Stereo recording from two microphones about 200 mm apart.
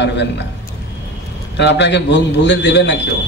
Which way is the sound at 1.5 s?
60° left (ahead or behind).